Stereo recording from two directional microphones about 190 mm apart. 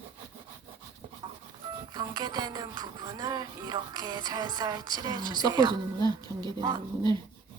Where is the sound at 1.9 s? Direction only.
20° right (ahead or behind).